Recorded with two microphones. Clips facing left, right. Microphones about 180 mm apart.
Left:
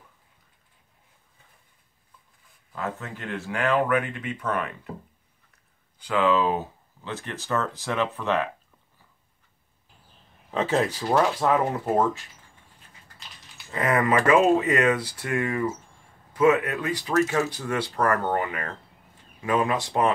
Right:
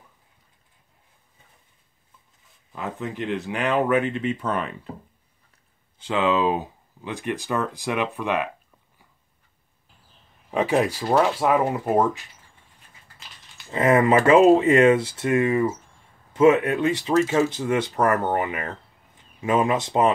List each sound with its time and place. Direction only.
2.7 s speech: 15° right (ahead or behind)
5.9 s speech: 20° right (ahead or behind)
10.5 s speech: 15° right (ahead or behind)
13.7 s speech: 25° right (ahead or behind)